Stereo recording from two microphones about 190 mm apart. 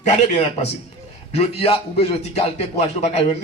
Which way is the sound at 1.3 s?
30° left (ahead or behind).